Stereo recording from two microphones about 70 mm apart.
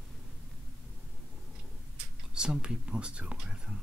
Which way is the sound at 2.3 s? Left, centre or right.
Centre.